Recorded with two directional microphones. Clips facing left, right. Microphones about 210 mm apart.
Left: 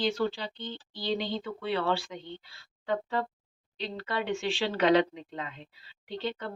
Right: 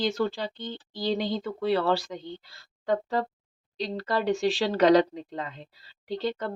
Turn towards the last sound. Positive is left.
turn(degrees=-40)  # may be behind; listen again after turning